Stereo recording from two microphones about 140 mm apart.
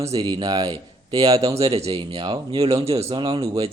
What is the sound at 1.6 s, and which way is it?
Speech, 40° right (ahead or behind).